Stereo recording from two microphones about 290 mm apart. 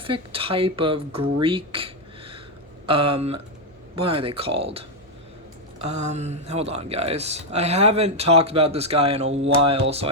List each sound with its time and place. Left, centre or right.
0.0 s speech: centre
1.4 s a sound: centre
2.8 s speech: centre
6.0 s speech: right